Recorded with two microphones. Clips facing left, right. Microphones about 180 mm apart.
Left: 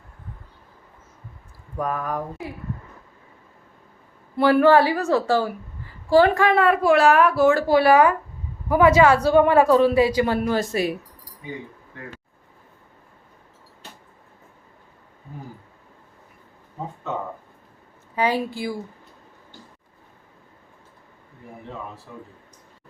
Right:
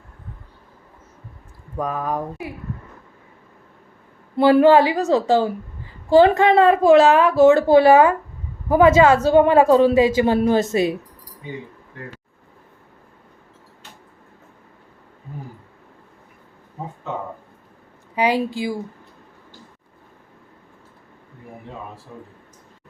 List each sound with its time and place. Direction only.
1.9 s speech: 20° right (ahead or behind)
4.4 s speech: 20° right (ahead or behind)
18.1 s a woman's voice: 15° right (ahead or behind)